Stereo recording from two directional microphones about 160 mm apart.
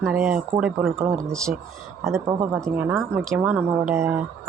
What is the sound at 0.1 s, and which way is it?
Speech, 10° right (ahead or behind).